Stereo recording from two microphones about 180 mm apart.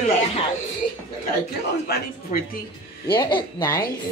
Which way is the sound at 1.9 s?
55° left (ahead or behind).